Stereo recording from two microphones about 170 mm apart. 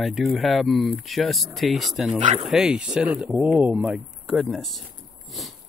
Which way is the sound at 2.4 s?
5° right (ahead or behind).